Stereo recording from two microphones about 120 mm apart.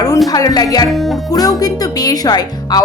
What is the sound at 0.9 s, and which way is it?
Speech, centre (ahead or behind).